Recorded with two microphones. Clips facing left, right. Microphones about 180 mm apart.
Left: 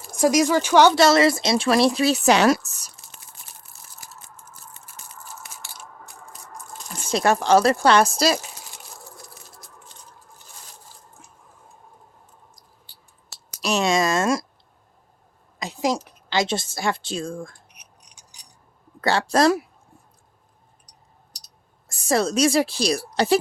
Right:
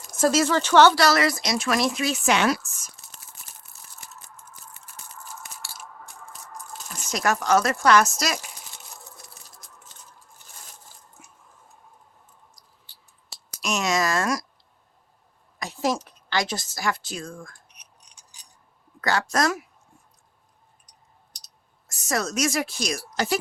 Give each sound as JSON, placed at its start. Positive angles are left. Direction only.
{"t": 0.1, "sound": "speech", "side_deg": 15}
{"t": 7.1, "sound": "speech", "side_deg": 30}
{"t": 11.2, "sound": "squish", "side_deg": -10}
{"t": 13.6, "sound": "speech", "side_deg": 35}
{"t": 15.5, "sound": "speech", "side_deg": 15}
{"t": 19.0, "sound": "speech", "side_deg": 30}
{"t": 21.8, "sound": "a woman's voice", "side_deg": 30}